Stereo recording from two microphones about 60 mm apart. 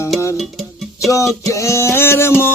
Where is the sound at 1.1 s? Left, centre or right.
Left.